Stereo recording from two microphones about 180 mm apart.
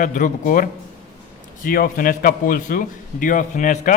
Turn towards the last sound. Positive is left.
turn(degrees=45)  # may be behind; listen again after turning